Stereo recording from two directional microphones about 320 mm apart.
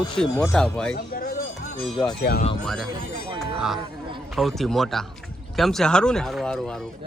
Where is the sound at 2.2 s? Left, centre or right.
Left.